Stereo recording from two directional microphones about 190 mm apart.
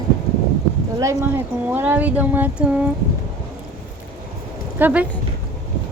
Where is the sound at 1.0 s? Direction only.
15° right (ahead or behind).